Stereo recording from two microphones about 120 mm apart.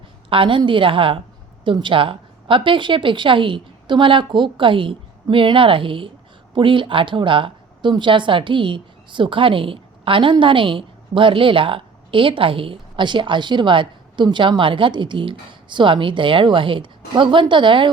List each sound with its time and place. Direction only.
0.3 s a woman's voice: 45° right (ahead or behind)